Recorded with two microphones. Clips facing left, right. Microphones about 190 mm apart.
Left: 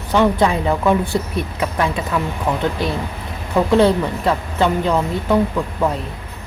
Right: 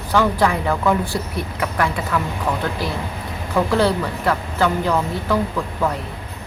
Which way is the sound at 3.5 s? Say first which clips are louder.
Left 4 dB; 20° left (ahead or behind).